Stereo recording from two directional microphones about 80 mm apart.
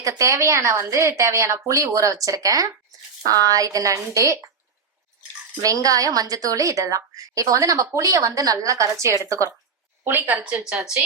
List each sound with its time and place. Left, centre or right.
0.0 s a woman's voice: right
5.6 s a woman's voice: right
10.0 s speech: right